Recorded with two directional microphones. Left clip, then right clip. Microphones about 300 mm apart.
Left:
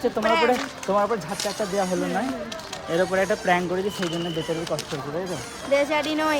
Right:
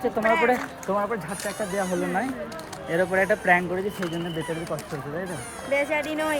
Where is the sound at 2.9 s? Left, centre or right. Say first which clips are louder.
Even; centre.